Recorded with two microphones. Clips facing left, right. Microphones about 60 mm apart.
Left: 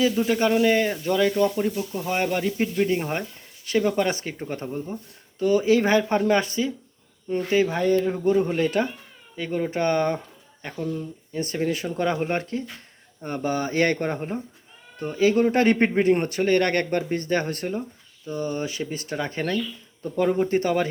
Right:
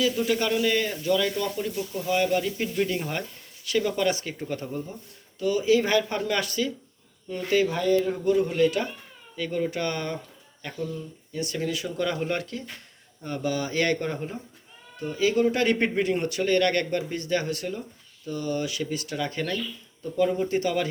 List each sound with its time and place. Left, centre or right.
0.0 s speech: left
2.8 s speech: left